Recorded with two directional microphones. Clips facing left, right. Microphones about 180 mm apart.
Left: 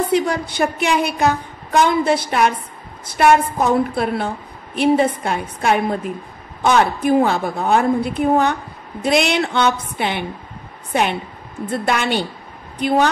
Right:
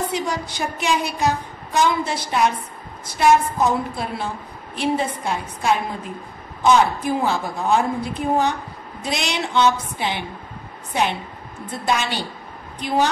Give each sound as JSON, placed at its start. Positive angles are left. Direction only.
{"t": 0.1, "sound": "a woman's voice", "side_deg": 60}